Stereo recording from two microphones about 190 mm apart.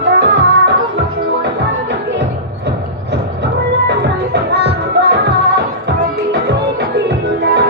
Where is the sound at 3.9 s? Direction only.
60° right (ahead or behind).